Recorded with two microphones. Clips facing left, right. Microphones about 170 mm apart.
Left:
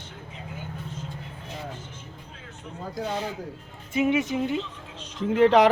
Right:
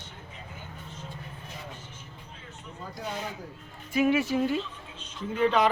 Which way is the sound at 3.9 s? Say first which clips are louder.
Left 1 dB; 20° left (ahead or behind).